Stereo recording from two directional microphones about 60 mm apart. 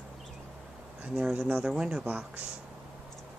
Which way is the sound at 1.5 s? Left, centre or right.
Centre.